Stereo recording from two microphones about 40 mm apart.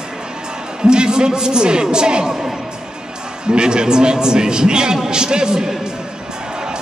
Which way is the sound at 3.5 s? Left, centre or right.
Right.